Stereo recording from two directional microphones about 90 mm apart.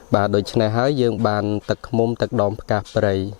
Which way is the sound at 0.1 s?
20° left (ahead or behind).